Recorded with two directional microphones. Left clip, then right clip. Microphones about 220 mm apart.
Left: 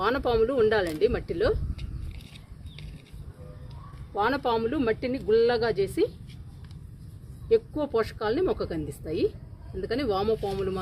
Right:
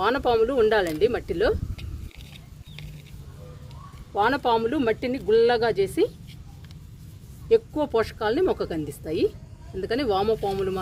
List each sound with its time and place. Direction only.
0.0 s speech: 15° right (ahead or behind)
4.1 s speech: 25° right (ahead or behind)
7.5 s speech: 25° right (ahead or behind)